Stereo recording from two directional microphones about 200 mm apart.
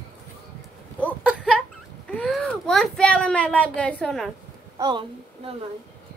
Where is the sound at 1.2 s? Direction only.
5° right (ahead or behind).